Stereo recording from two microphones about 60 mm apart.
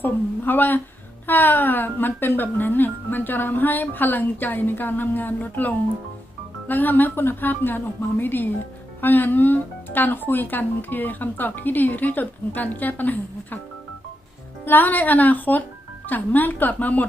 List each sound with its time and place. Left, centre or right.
0.0 s speech: left
14.6 s speech: left